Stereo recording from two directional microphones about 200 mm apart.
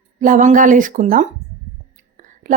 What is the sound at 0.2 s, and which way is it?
Speech, 40° right (ahead or behind).